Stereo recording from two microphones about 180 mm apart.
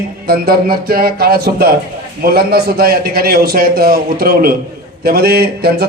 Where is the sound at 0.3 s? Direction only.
55° right (ahead or behind).